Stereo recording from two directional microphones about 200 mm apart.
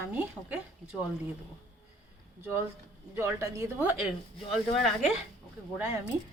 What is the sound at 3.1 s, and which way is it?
Speech, 15° right (ahead or behind).